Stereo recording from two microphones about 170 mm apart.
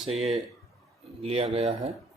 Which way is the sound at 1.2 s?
35° right (ahead or behind).